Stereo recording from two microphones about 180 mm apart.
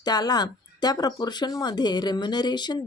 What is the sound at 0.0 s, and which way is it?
Speech, 20° left (ahead or behind).